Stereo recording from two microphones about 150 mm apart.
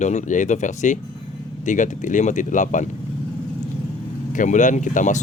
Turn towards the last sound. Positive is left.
turn(degrees=55)  # may be behind; listen again after turning